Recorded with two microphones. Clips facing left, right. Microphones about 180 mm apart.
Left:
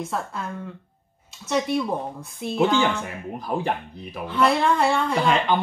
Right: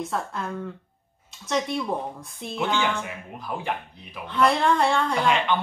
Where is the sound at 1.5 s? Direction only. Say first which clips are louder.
Left 3 dB; centre (ahead or behind).